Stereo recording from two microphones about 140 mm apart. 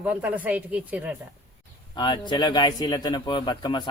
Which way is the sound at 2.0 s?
35° left (ahead or behind).